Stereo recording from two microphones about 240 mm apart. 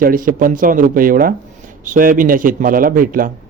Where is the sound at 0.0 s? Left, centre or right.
Right.